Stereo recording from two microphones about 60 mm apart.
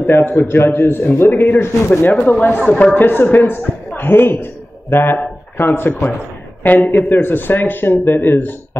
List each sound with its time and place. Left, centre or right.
0.0 s a man's voice: left